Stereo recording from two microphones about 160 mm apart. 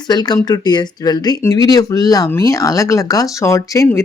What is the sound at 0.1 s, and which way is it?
Speech, 25° left (ahead or behind).